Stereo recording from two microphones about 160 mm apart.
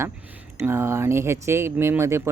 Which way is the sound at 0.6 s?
15° right (ahead or behind).